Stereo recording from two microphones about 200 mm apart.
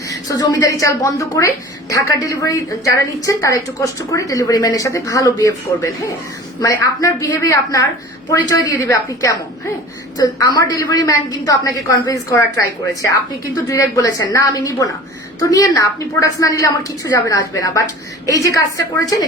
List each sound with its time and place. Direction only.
0.3 s a woman's voice: 15° left (ahead or behind)